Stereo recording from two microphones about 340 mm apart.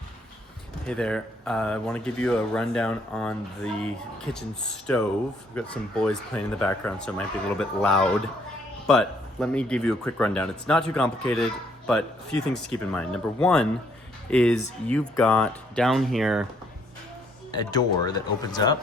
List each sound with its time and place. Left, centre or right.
0.9 s speech: centre
17.5 s speech: centre